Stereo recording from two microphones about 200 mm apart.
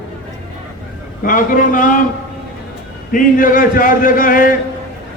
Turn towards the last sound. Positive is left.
turn(degrees=45)  # may be behind; listen again after turning